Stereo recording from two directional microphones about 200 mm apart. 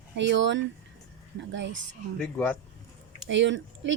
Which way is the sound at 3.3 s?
65° right (ahead or behind).